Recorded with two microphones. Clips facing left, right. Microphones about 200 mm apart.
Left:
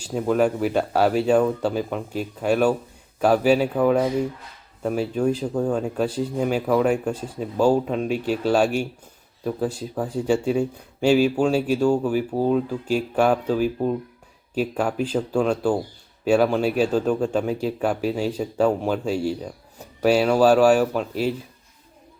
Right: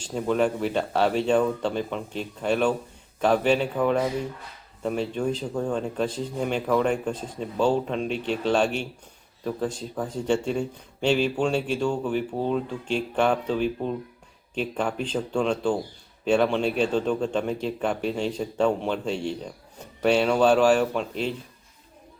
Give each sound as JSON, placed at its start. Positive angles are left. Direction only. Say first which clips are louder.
{"t": 0.0, "sound": "speech", "louder": "left 3 dB", "side_deg": 5}